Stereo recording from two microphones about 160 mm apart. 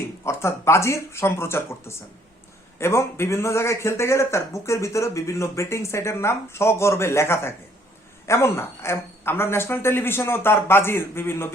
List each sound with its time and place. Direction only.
0.3 s speech: 15° left (ahead or behind)